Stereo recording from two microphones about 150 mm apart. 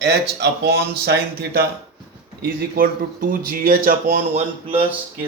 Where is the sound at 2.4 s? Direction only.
75° right (ahead or behind); by 4.4 s 55° right (ahead or behind).